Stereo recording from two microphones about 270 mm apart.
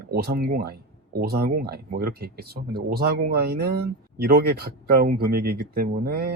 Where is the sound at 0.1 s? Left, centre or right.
Right.